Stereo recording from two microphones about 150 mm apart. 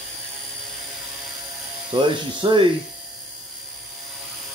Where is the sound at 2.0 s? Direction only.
30° right (ahead or behind).